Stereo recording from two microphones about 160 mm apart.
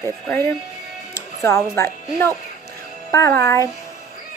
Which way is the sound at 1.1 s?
15° left (ahead or behind).